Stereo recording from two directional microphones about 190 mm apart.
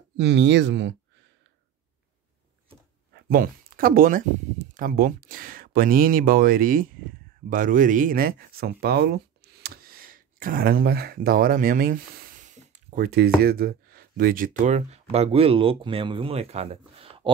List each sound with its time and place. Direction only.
0.2 s speech: 65° right (ahead or behind)
3.3 s speech: 50° right (ahead or behind); by 17.3 s 30° right (ahead or behind)